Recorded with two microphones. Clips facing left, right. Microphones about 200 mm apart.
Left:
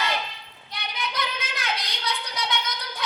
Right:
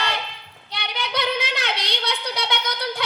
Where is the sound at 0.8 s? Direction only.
70° right (ahead or behind).